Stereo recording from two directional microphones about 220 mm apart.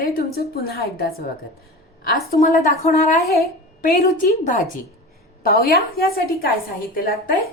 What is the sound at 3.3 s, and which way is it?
A woman's voice, 45° left (ahead or behind).